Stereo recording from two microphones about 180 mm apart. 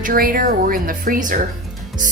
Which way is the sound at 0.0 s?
55° right (ahead or behind).